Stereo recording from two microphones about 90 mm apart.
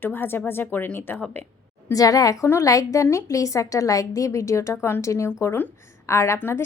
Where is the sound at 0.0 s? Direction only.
25° left (ahead or behind).